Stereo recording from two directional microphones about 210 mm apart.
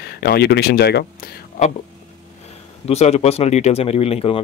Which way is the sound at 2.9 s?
30° left (ahead or behind).